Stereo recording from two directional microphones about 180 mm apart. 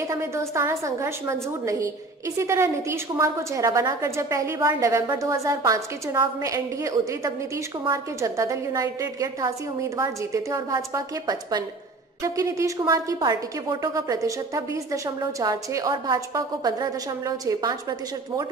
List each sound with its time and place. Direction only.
0.1 s a woman's voice: 15° right (ahead or behind)